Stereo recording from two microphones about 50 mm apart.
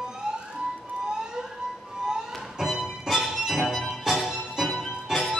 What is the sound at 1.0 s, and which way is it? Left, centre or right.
Emergency vehicle, centre.